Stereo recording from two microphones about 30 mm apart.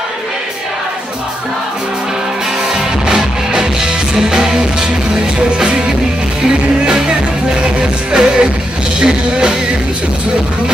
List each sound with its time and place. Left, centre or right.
2.7 s music: right